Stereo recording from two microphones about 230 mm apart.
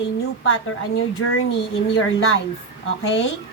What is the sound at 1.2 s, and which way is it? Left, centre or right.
Speech, left.